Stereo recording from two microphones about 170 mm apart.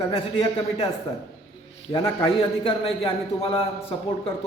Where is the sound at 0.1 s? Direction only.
35° left (ahead or behind).